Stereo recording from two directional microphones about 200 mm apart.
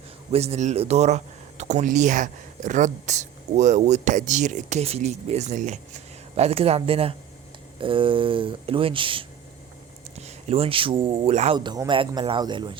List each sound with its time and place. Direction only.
0.3 s a man's voice: 30° right (ahead or behind)